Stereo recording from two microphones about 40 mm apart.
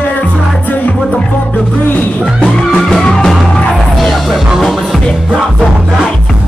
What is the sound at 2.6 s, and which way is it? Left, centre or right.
Music, centre.